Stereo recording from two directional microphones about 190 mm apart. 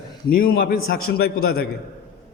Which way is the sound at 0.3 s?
50° left (ahead or behind).